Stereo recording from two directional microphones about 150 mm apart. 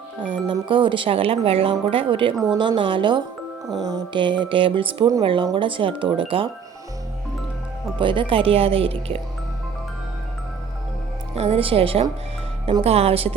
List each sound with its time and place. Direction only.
0.3 s speech: 35° right (ahead or behind)
7.9 s speech: 35° right (ahead or behind)
11.3 s speech: 40° right (ahead or behind)